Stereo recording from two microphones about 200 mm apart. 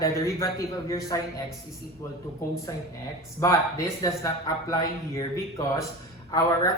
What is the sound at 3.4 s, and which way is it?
Speech, 15° left (ahead or behind).